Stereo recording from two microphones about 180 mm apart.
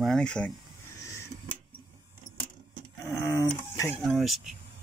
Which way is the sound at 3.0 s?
20° left (ahead or behind).